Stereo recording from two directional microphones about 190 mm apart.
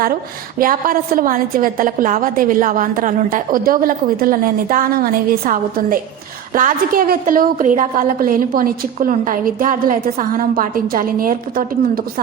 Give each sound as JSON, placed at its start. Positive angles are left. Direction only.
{"t": 0.6, "sound": "a woman's voice", "side_deg": -45}